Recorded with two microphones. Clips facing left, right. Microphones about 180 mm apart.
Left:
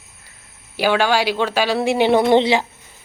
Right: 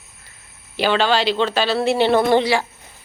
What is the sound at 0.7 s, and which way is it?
A man's voice, 10° left (ahead or behind).